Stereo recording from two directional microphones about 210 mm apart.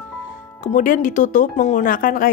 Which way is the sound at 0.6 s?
40° left (ahead or behind).